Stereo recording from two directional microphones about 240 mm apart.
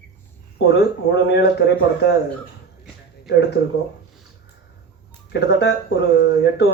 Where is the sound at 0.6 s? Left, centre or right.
Left.